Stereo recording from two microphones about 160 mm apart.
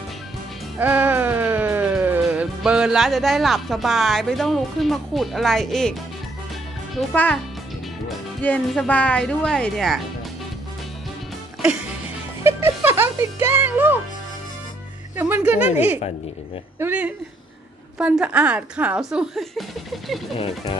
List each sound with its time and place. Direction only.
0.7 s music: 10° right (ahead or behind)
2.2 s speech: 5° right (ahead or behind)
7.0 s speech: 10° left (ahead or behind)
8.4 s speech: 5° left (ahead or behind)
12.4 s music: 15° right (ahead or behind)
15.1 s a woman's voice: 10° right (ahead or behind)
20.3 s speech: 35° left (ahead or behind)